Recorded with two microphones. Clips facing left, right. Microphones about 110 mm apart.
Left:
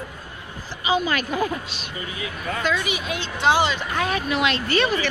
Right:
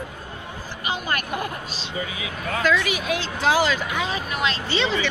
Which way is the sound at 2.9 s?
Centre (ahead or behind).